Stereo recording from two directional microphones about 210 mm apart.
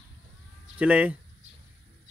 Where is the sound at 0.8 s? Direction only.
5° right (ahead or behind).